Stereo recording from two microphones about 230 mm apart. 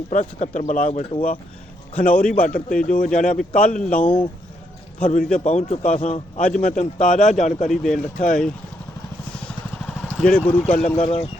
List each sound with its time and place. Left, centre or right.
0.1 s a man's voice: left
5.0 s a man's voice: left
7.7 s speech: centre
7.9 s a man's voice: left
9.3 s vehicle: centre
10.4 s speech: centre
10.8 s speech: left